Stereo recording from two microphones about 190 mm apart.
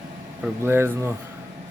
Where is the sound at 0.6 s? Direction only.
10° right (ahead or behind).